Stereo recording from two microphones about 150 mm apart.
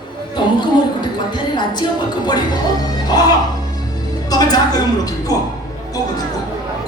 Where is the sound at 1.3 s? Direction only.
30° left (ahead or behind).